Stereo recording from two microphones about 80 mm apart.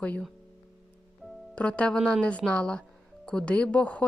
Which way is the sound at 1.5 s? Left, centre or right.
Centre.